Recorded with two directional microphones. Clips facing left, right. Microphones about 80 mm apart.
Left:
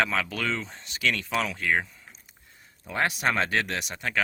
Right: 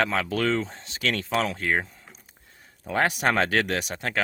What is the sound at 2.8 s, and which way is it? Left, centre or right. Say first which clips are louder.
Speech: right 3 dB; right.